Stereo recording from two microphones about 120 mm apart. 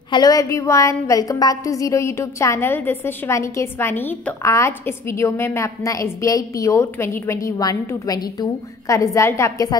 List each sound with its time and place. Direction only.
0.1 s a woman's voice: 30° left (ahead or behind)